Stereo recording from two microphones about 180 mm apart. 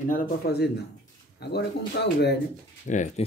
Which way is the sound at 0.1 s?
65° left (ahead or behind).